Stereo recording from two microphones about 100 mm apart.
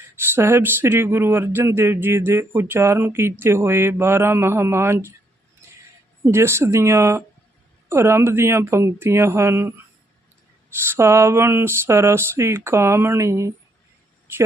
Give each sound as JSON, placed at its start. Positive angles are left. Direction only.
{"t": 0.2, "sound": "speech", "side_deg": -25}
{"t": 6.2, "sound": "speech", "side_deg": -25}
{"t": 10.8, "sound": "speech", "side_deg": -25}